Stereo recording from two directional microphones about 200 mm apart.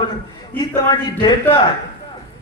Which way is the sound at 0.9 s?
20° left (ahead or behind).